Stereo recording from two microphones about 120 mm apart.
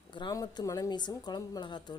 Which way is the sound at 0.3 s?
30° left (ahead or behind).